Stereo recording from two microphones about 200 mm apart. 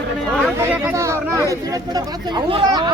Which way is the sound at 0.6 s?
15° right (ahead or behind).